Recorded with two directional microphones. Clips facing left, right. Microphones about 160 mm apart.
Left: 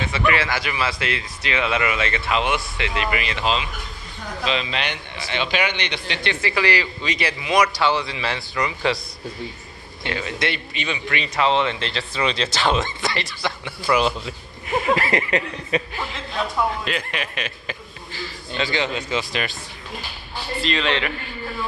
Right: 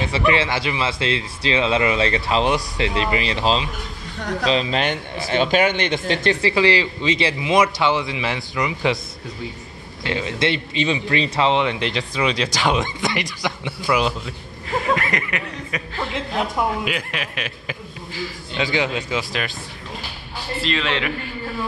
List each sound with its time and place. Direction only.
0.3 s a man's voice: 25° right (ahead or behind); by 6.3 s 45° right (ahead or behind)
6.4 s a man's voice: 25° right (ahead or behind)
10.1 s speech: 25° right (ahead or behind)
13.8 s a man's voice: 5° right (ahead or behind)
14.7 s chuckle: 25° left (ahead or behind)
16.8 s a man's voice: 5° right (ahead or behind)
20.6 s a man's voice: centre (ahead or behind)